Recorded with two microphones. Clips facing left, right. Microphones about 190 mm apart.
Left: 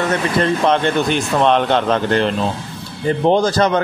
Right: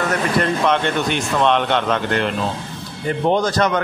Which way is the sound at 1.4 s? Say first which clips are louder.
Left 2 dB; 35° left (ahead or behind).